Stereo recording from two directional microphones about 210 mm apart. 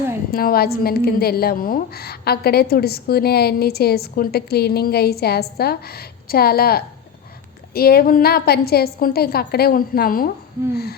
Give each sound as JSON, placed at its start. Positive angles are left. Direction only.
{"t": 0.3, "sound": "a woman's voice", "side_deg": 45}